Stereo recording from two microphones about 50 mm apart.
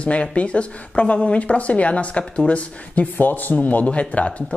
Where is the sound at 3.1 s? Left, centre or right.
Left.